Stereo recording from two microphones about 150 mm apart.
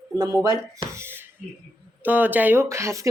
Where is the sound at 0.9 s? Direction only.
15° right (ahead or behind).